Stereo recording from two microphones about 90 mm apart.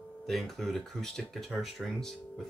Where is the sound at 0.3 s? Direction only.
Centre (ahead or behind).